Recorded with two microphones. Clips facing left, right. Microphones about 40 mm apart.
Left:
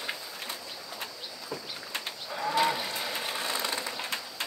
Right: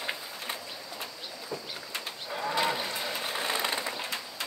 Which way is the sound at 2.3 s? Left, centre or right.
Centre.